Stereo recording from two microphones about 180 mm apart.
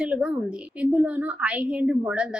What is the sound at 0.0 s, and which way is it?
A woman's voice, 5° right (ahead or behind).